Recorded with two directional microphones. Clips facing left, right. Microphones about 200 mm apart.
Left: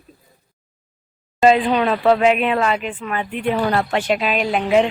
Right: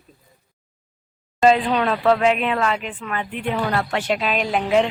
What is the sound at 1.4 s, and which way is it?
Speech, 10° left (ahead or behind).